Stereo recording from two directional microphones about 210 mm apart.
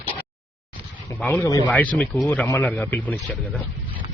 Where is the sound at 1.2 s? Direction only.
10° left (ahead or behind).